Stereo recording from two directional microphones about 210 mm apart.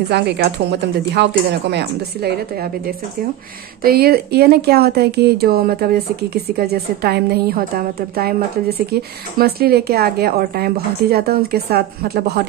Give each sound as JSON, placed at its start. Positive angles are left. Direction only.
{"t": 0.1, "sound": "a woman's voice", "side_deg": -55}
{"t": 3.8, "sound": "a woman's voice", "side_deg": -45}